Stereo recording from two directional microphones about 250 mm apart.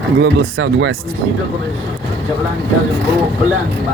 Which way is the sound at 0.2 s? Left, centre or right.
Right.